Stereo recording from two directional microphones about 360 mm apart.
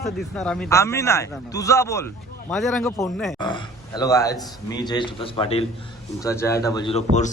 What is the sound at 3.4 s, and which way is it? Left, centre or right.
A man's voice, centre.